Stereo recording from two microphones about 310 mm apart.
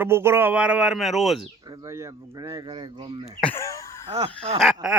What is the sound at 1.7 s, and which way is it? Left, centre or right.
Speech, centre.